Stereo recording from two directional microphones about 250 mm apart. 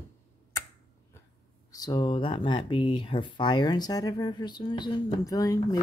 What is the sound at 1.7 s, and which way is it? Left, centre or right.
Speech, centre.